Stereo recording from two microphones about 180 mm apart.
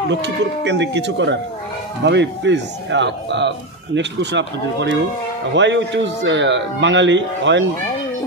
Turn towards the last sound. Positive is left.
turn(degrees=-90)